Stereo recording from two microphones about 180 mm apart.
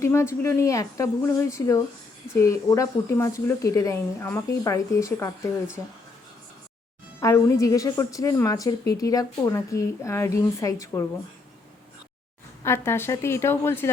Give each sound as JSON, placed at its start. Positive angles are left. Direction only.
{"t": 0.0, "sound": "speech", "side_deg": 15}
{"t": 7.2, "sound": "speech", "side_deg": 20}
{"t": 12.6, "sound": "speech", "side_deg": 15}